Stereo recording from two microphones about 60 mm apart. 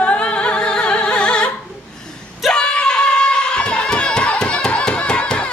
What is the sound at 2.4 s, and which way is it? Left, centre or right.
Music, centre.